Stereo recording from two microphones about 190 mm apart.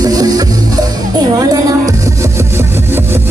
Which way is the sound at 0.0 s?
20° right (ahead or behind).